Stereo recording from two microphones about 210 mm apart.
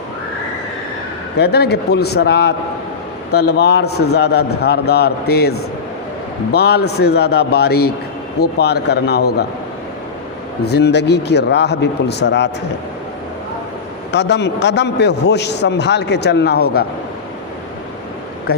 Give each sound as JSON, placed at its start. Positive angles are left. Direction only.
{"t": 1.4, "sound": "a man's voice", "side_deg": 50}
{"t": 10.6, "sound": "a man's voice", "side_deg": 50}
{"t": 14.1, "sound": "a man's voice", "side_deg": 55}